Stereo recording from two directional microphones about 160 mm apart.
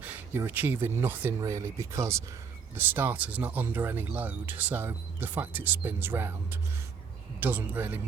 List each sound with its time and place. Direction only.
0.0 s speech: 10° right (ahead or behind)